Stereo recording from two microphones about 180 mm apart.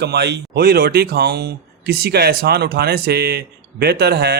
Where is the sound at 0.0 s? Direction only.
70° right (ahead or behind).